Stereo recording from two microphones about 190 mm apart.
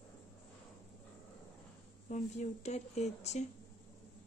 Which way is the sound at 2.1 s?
35° left (ahead or behind).